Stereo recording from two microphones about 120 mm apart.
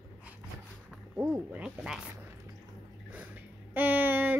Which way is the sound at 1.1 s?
15° right (ahead or behind).